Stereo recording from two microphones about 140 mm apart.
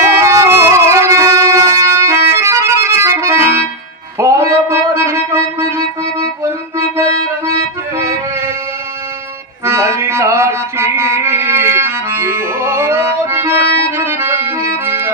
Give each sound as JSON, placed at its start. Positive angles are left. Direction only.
{"t": 0.2, "sound": "music", "side_deg": -20}
{"t": 9.6, "sound": "music", "side_deg": -20}